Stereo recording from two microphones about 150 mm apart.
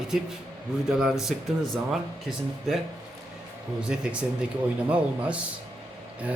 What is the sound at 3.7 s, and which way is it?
Speech, 5° right (ahead or behind).